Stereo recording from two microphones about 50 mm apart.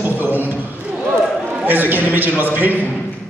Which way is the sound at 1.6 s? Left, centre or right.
Right.